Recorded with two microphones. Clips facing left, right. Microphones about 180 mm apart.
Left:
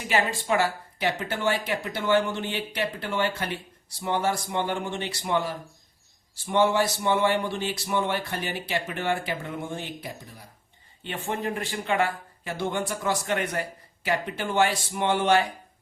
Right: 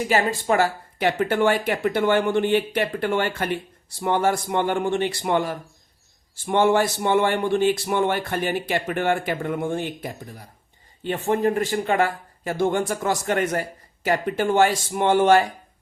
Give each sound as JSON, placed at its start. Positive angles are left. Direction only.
{"t": 0.1, "sound": "speech", "side_deg": -40}